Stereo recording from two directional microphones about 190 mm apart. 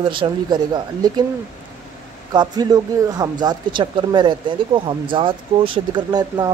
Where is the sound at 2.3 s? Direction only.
20° right (ahead or behind).